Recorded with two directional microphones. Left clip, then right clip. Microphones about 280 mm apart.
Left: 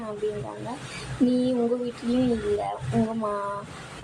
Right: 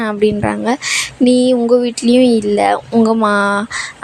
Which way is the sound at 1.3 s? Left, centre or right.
Right.